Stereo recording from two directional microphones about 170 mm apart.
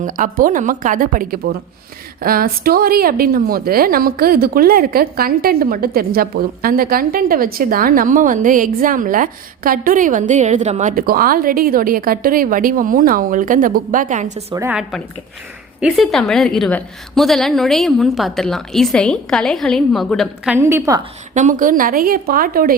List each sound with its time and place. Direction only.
0.0 s a woman's voice: 50° right (ahead or behind)
14.5 s a woman's voice: 15° right (ahead or behind)
15.8 s a woman's voice: centre (ahead or behind)
20.6 s a woman's voice: 15° right (ahead or behind)
21.3 s a woman's voice: 50° right (ahead or behind)